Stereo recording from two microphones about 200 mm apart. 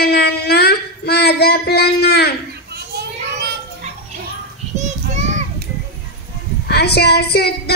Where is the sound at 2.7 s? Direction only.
55° right (ahead or behind).